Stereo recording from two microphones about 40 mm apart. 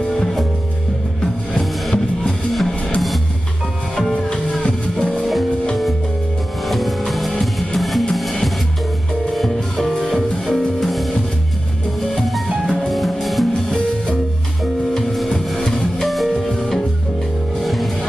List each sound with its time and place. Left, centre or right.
0.0 s music: centre
4.1 s music: centre
6.6 s music: centre
12.2 s music: centre
15.0 s music: centre